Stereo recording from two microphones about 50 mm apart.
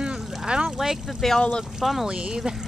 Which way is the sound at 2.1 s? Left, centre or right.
Centre.